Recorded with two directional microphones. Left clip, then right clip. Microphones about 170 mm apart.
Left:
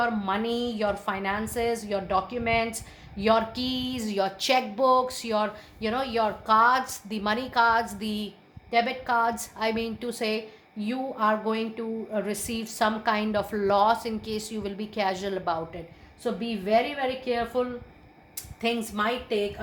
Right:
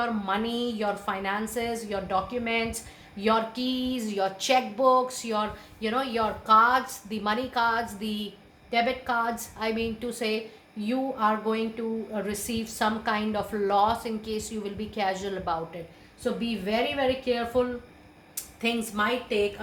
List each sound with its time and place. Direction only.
0.0 s a woman's voice: 40° left (ahead or behind)
19.0 s a woman's voice: 40° left (ahead or behind)